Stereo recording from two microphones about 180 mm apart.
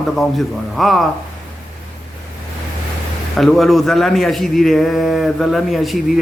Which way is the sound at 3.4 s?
Centre (ahead or behind).